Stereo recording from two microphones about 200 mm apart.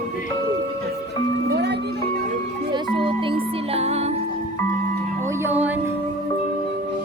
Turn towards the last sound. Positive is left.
turn(degrees=-10)  # may be behind; listen again after turning